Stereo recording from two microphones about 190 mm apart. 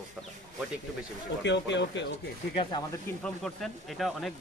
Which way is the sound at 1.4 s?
70° left (ahead or behind).